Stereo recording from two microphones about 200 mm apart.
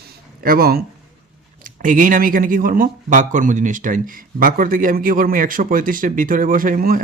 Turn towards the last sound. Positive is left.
turn(degrees=-45)  # may be behind; listen again after turning